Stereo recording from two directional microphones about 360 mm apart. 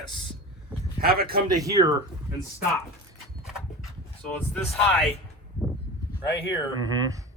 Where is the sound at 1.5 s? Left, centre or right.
Centre.